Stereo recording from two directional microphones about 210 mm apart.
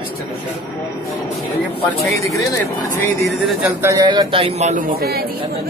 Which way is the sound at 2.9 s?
Centre (ahead or behind).